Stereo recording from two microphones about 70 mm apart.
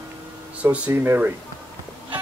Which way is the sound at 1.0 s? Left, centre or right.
Right.